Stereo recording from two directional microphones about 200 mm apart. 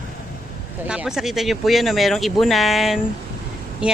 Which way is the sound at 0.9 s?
5° right (ahead or behind).